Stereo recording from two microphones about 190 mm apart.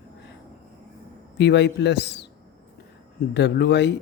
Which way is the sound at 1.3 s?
65° left (ahead or behind).